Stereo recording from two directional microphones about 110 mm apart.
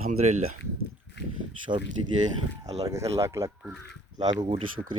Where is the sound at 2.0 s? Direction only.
45° right (ahead or behind).